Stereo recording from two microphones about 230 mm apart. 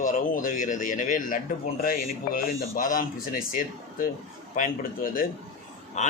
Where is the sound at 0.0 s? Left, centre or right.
Left.